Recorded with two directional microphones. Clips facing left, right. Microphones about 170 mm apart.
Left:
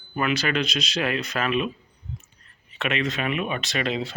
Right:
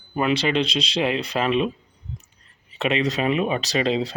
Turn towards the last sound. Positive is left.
turn(degrees=-30)  # may be behind; listen again after turning